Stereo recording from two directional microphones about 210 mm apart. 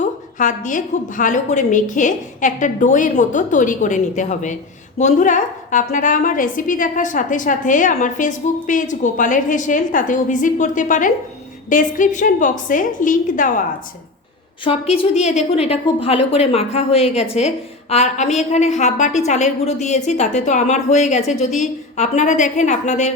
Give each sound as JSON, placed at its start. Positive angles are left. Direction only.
{"t": 0.3, "sound": "a woman's voice", "side_deg": 40}
{"t": 14.6, "sound": "a woman's voice", "side_deg": 25}